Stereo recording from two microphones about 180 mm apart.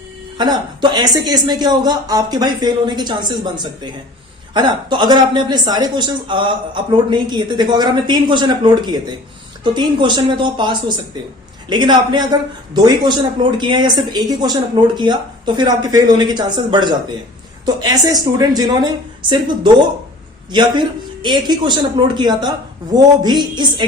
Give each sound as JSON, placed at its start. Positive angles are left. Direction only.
{"t": 0.3, "sound": "a woman's voice", "side_deg": -25}